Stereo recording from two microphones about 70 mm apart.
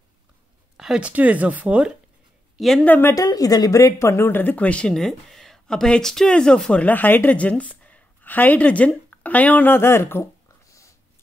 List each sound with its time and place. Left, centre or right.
0.7 s a sound: centre
1.0 s speech: right
2.8 s speech: left
3.2 s speech: left; by 4.9 s centre
4.9 s speech: centre; by 10.2 s left
10.7 s a sound: left